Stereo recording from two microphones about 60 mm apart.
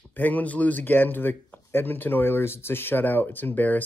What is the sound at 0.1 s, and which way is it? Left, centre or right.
Speech, left.